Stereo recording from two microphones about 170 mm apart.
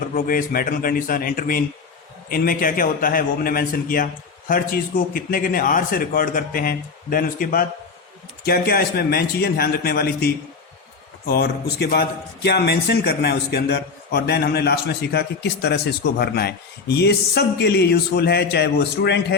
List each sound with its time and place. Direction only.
0.1 s a man's voice: 55° left (ahead or behind); by 19.2 s 75° left (ahead or behind)